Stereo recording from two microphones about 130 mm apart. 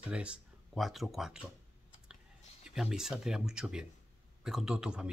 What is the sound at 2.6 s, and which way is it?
Speech, 5° right (ahead or behind).